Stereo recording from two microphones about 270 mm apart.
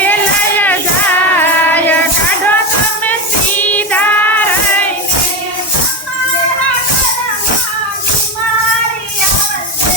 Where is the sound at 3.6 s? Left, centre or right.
Centre.